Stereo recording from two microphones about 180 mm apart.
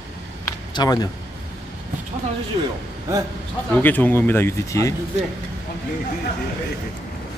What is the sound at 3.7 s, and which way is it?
Speech, 10° left (ahead or behind).